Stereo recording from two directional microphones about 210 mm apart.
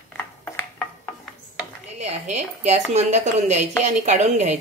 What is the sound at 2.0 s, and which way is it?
A woman's voice, 35° right (ahead or behind).